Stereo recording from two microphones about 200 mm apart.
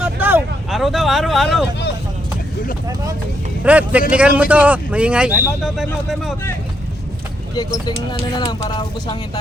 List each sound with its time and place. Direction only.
0.0 s vehicle: 10° right (ahead or behind)
3.6 s speech: 5° right (ahead or behind)
8.4 s speech: 20° left (ahead or behind)